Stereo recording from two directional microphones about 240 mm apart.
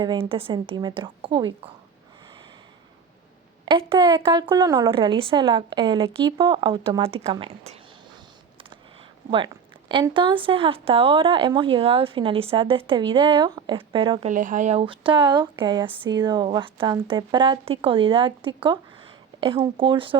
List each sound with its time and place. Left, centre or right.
0.0 s a woman's voice: right
3.7 s a woman's voice: right
8.7 s a sound: right
9.9 s a woman's voice: centre